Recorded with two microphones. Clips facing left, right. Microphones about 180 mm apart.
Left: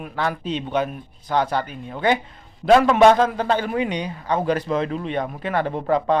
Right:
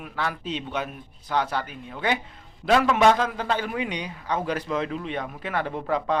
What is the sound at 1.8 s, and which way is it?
A man's voice, 45° left (ahead or behind).